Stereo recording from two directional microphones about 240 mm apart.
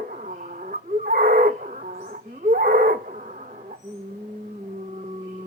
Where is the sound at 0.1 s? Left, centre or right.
Right.